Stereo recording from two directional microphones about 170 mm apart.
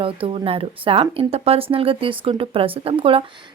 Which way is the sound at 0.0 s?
35° right (ahead or behind).